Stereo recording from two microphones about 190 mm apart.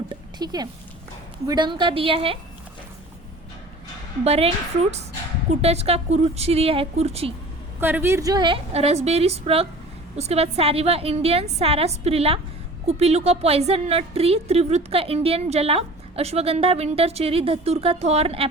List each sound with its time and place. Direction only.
0.1 s a sound: 20° right (ahead or behind)
1.5 s a woman's voice: 25° right (ahead or behind)
4.2 s a woman's voice: 30° right (ahead or behind)
7.8 s a woman's voice: 10° right (ahead or behind); by 18.4 s 30° right (ahead or behind)